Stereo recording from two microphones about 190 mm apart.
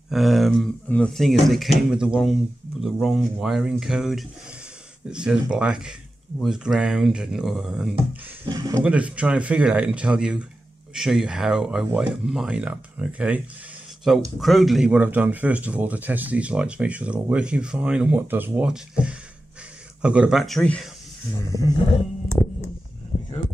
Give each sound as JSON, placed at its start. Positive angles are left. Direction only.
{"t": 0.1, "sound": "speech", "side_deg": 0}
{"t": 8.5, "sound": "speech", "side_deg": -20}
{"t": 8.8, "sound": "speech", "side_deg": -5}